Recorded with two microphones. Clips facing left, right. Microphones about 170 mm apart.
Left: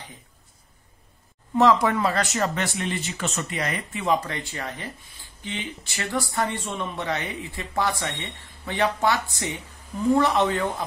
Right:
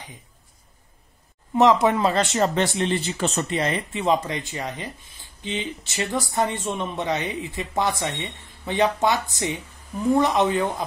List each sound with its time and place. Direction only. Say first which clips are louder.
1.5 s speech: right 2 dB; 20° right (ahead or behind)